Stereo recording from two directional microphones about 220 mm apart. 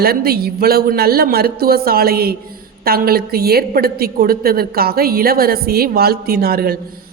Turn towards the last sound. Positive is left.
turn(degrees=-45)  # may be behind; listen again after turning